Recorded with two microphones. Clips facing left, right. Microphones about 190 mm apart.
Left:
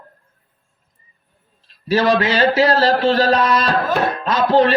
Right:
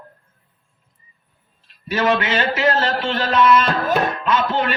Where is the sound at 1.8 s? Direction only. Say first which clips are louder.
Left 4 dB; 35° left (ahead or behind).